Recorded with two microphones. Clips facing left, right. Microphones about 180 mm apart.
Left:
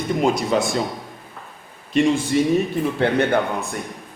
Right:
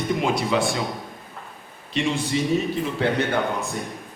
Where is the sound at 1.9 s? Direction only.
50° left (ahead or behind).